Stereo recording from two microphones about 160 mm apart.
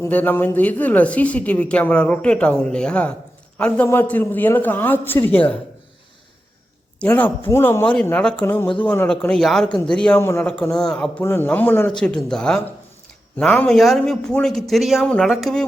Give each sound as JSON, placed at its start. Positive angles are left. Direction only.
{"t": 0.0, "sound": "a woman's voice", "side_deg": 10}
{"t": 7.0, "sound": "a woman's voice", "side_deg": 10}
{"t": 9.6, "sound": "speech", "side_deg": 30}
{"t": 9.9, "sound": "speech", "side_deg": 5}
{"t": 10.2, "sound": "a woman's voice", "side_deg": 15}
{"t": 10.4, "sound": "a woman's voice", "side_deg": 5}